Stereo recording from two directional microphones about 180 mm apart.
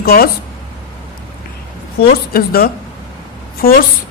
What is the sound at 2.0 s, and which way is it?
Speech, 55° left (ahead or behind).